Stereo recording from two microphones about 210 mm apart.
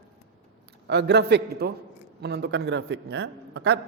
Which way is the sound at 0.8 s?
55° right (ahead or behind).